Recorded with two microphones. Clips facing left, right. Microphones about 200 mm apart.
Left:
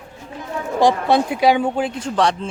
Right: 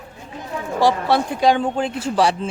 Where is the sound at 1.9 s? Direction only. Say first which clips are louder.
Right 1 dB; 5° right (ahead or behind).